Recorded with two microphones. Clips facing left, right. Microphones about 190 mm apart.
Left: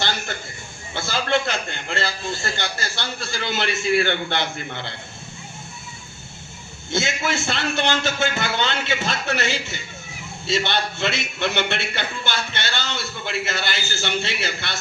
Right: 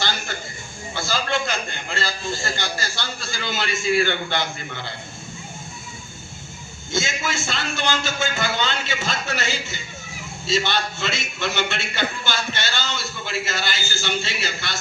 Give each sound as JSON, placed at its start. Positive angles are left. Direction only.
{"t": 0.9, "sound": "a man's voice", "side_deg": 60}
{"t": 6.9, "sound": "a man's voice", "side_deg": 60}